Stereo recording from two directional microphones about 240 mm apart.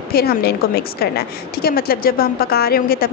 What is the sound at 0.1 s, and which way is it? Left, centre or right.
A woman's voice, left.